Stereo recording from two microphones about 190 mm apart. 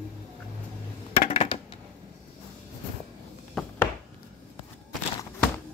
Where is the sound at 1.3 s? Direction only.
30° left (ahead or behind).